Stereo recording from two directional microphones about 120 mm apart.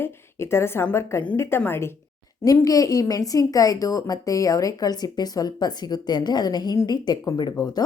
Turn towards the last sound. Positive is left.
turn(degrees=35)  # may be behind; listen again after turning